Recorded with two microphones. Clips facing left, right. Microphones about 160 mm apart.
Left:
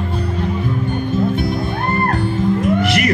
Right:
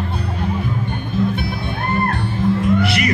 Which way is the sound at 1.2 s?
45° left (ahead or behind).